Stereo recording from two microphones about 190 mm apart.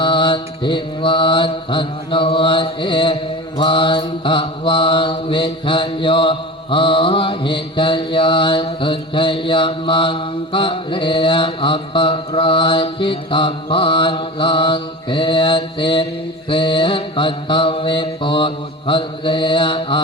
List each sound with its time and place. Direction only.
0.0 s mantra: 25° left (ahead or behind)